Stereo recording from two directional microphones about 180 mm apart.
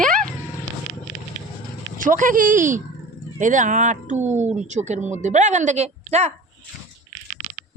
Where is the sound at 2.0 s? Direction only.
45° right (ahead or behind).